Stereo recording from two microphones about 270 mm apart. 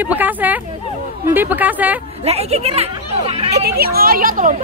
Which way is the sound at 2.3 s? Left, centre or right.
Right.